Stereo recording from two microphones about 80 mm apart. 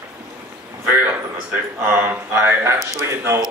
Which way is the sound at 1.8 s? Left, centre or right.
Right.